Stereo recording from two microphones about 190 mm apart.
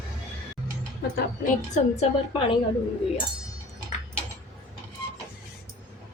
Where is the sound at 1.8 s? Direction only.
40° left (ahead or behind).